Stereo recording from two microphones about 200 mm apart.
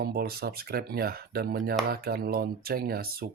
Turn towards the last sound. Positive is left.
turn(degrees=-50)  # may be behind; listen again after turning